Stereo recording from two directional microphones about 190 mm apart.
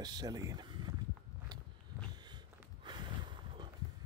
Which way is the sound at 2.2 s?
25° right (ahead or behind).